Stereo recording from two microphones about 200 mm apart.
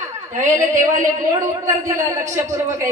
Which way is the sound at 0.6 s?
40° right (ahead or behind).